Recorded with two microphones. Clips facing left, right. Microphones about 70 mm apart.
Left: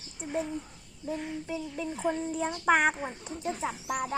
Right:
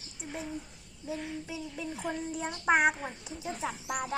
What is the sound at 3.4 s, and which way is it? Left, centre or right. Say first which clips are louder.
Speech: left 3 dB; centre.